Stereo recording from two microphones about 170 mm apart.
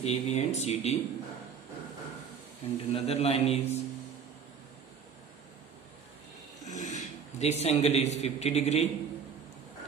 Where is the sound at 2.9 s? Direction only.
35° left (ahead or behind).